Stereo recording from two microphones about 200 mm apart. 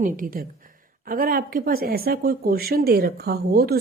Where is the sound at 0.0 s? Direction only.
45° right (ahead or behind).